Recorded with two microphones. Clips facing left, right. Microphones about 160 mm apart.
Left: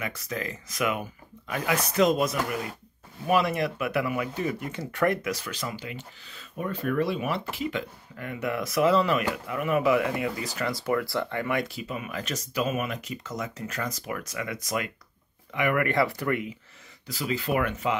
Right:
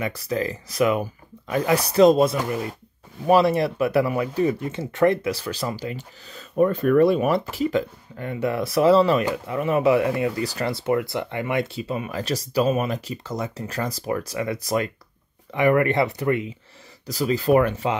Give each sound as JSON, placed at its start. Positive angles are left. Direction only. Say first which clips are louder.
{"t": 0.0, "sound": "speech", "louder": "right 8 dB", "side_deg": -35}
{"t": 6.5, "sound": "speech", "louder": "right 11 dB", "side_deg": -50}
{"t": 17.0, "sound": "speech", "louder": "right 7 dB", "side_deg": -40}